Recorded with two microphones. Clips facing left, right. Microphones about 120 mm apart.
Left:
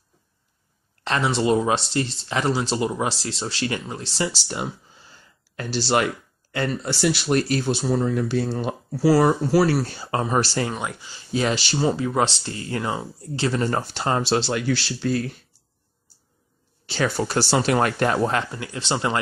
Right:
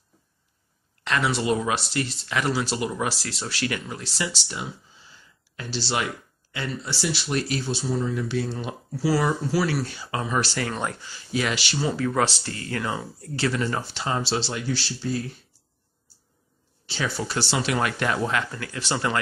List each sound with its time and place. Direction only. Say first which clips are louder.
1.0 s speech: left 3 dB; 30° left (ahead or behind)
4.5 s speech: left 5 dB; 45° left (ahead or behind)
10.7 s speech: even; 10° left (ahead or behind)
11.1 s speech: left 6 dB; 30° left (ahead or behind)
13.6 s speech: left 3 dB; 45° left (ahead or behind); by 15.3 s 70° left (ahead or behind)
16.8 s speech: left 5 dB; 55° left (ahead or behind); by 18.4 s 40° left (ahead or behind)
18.5 s speech: left 2 dB; 20° left (ahead or behind)